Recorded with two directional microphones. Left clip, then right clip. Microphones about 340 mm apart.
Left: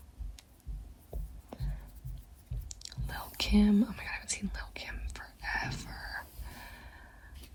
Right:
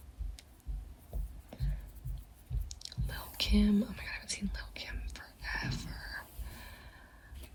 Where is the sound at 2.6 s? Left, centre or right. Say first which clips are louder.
Left 1 dB; centre.